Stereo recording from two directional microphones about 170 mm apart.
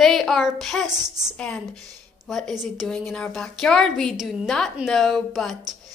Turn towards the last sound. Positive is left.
turn(degrees=0)  # may be behind; listen again after turning